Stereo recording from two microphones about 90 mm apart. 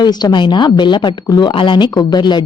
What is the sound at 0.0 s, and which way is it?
Speech, 50° left (ahead or behind).